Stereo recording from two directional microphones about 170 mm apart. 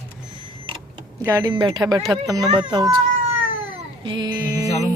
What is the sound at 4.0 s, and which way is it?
Speech, 25° right (ahead or behind).